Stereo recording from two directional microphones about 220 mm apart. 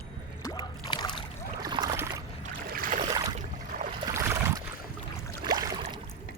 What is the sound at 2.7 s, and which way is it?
Boat, 40° right (ahead or behind).